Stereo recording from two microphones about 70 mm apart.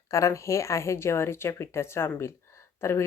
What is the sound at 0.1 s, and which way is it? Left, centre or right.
A woman's voice, left.